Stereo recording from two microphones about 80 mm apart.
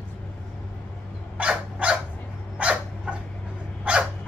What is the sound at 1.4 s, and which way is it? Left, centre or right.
Dog, centre.